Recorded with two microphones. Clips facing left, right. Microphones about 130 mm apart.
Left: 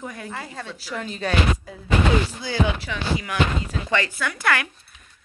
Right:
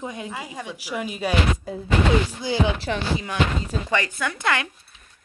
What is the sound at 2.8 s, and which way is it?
Chopping, 25° right (ahead or behind).